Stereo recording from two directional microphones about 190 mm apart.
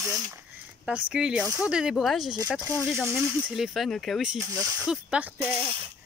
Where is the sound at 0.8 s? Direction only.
5° right (ahead or behind).